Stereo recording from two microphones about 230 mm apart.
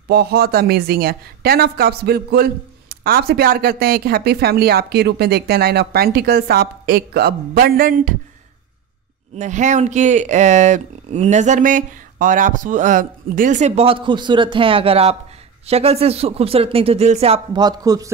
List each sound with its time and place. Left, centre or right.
0.1 s speech: right
9.3 s speech: right; by 18.1 s centre